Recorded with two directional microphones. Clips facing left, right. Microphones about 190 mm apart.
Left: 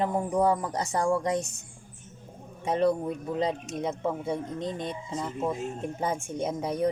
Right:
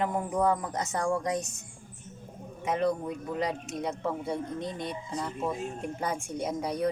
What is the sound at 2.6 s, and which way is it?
Speech, 30° left (ahead or behind).